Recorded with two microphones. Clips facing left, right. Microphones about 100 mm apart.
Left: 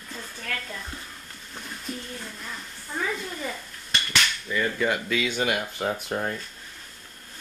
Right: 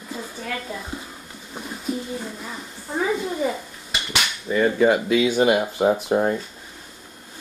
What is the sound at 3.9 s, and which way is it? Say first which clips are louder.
Dishes: right 1 dB; 10° right (ahead or behind).